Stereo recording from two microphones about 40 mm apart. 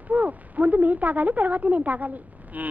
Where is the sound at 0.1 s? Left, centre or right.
Right.